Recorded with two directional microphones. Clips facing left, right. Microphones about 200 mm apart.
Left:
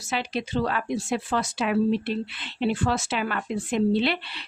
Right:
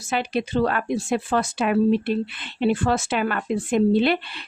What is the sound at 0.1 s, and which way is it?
Speech, 55° right (ahead or behind).